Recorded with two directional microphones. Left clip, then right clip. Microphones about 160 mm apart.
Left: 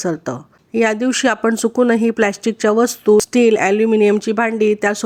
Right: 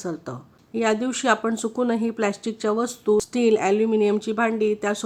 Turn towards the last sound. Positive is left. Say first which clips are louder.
# left 7 dB
turn(degrees=30)  # may be behind; listen again after turning